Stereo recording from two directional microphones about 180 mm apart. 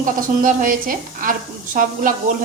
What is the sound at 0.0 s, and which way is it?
Speech, 50° right (ahead or behind).